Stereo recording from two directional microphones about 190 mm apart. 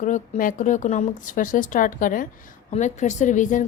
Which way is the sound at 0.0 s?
45° left (ahead or behind).